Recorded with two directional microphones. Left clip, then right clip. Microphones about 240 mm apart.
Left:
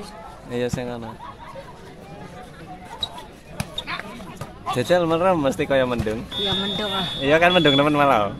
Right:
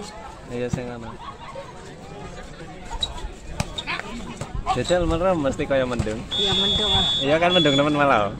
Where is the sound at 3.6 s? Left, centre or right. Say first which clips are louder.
Right 1 dB; centre.